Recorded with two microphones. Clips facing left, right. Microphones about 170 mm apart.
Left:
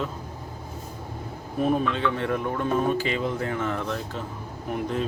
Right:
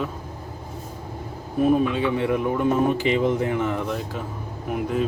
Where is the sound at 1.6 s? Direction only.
5° right (ahead or behind).